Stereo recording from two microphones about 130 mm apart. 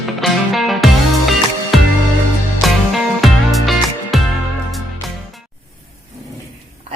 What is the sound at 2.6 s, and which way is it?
Music, centre (ahead or behind).